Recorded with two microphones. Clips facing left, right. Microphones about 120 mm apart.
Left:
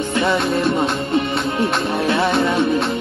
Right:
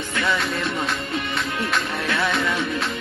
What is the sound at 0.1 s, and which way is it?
Music, 25° left (ahead or behind).